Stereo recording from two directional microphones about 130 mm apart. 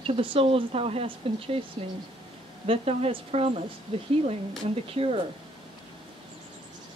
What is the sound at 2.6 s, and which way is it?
Speech, 50° right (ahead or behind).